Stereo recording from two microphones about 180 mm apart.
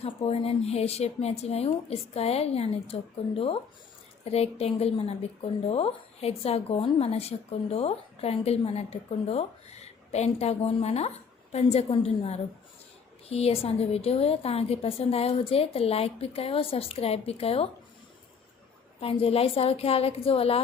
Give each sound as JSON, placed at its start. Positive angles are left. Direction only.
{"t": 0.0, "sound": "speech", "side_deg": 35}
{"t": 18.9, "sound": "speech", "side_deg": 35}